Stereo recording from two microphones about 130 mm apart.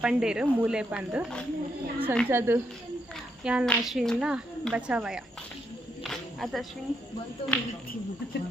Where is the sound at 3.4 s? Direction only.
5° right (ahead or behind).